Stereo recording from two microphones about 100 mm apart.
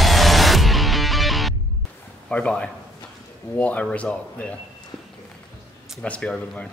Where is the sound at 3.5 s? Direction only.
15° left (ahead or behind).